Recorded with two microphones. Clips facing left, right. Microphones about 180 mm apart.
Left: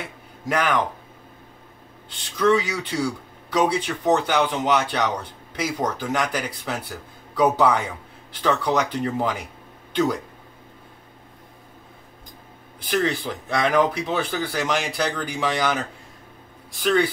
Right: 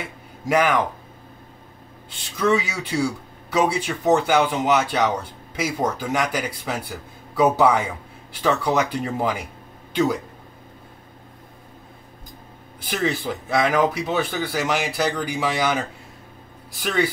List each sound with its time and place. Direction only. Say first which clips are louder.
0.5 s speech: right 3 dB; 10° right (ahead or behind)
2.0 s speech: left 1 dB; 10° right (ahead or behind)
13.0 s speech: right 1 dB; 5° right (ahead or behind)